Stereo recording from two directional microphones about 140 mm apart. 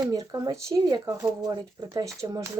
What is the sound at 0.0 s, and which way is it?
Speech, 25° right (ahead or behind).